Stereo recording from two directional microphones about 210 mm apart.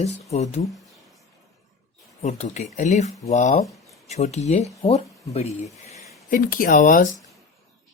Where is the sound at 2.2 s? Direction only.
35° left (ahead or behind).